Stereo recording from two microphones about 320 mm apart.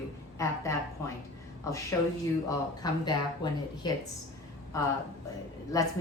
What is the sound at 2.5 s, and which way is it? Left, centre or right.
Speech, centre.